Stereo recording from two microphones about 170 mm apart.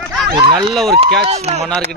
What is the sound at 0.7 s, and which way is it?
Speech, centre (ahead or behind).